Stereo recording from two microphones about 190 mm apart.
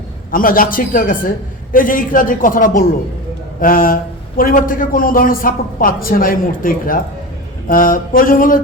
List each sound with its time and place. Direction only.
0.3 s a man's voice: 45° left (ahead or behind)